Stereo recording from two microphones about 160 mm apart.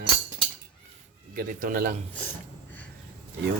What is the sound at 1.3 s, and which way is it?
Speech, 60° right (ahead or behind).